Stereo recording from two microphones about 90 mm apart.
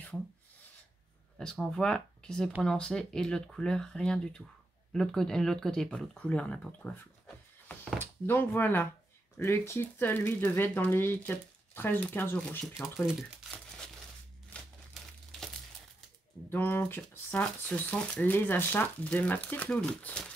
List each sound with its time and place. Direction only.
1.4 s speech: 5° left (ahead or behind)
16.4 s speech: 25° left (ahead or behind)